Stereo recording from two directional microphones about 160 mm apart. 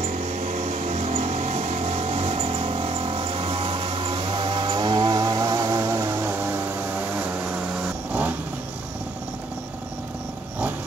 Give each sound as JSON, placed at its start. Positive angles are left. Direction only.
{"t": 0.0, "sound": "vehicle", "side_deg": -50}